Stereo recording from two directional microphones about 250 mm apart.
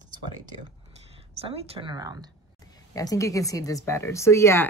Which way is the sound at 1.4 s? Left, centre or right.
Right.